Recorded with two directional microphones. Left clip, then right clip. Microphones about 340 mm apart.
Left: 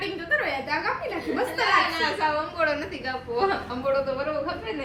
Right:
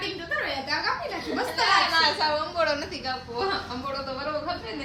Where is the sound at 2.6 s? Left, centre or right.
Centre.